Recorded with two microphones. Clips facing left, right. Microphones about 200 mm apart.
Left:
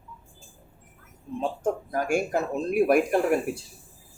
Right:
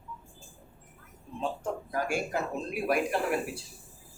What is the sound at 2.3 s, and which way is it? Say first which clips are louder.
A man's voice: left 9 dB; 45° left (ahead or behind).